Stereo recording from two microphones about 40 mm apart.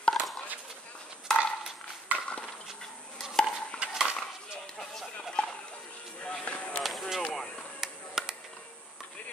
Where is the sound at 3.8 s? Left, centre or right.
Right.